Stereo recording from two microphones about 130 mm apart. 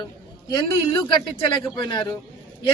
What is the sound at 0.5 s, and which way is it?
A man's voice, 35° left (ahead or behind).